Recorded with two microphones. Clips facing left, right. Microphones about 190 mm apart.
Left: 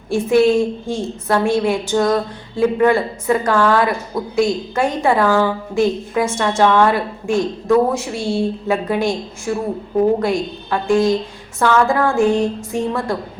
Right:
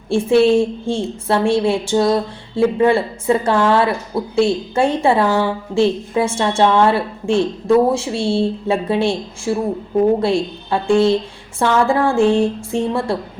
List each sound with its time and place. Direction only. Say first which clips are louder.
0.1 s a woman's voice: right 1 dB; 30° right (ahead or behind)